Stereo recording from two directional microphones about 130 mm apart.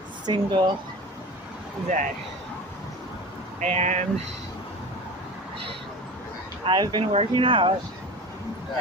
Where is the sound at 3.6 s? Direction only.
65° right (ahead or behind).